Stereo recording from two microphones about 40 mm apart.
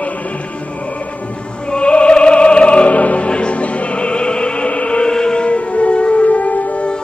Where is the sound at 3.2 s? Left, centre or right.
Left.